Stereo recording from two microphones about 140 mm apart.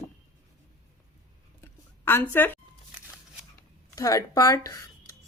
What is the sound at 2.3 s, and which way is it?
Speech, 15° left (ahead or behind).